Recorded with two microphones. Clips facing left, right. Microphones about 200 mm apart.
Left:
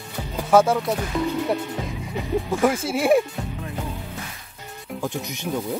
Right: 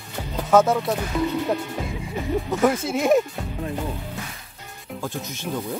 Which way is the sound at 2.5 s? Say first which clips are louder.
Right 1 dB; 10° left (ahead or behind).